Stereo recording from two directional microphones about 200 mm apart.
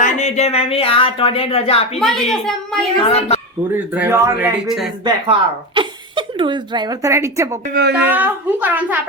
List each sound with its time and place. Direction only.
0.0 s speech: 35° left (ahead or behind)
2.0 s a child's voice: centre (ahead or behind)
3.0 s a woman's voice: 30° left (ahead or behind)
3.8 s a woman's voice: 10° right (ahead or behind)
5.0 s speech: 25° right (ahead or behind)
7.7 s a woman's voice: 55° right (ahead or behind)
7.9 s a woman's voice: 10° right (ahead or behind)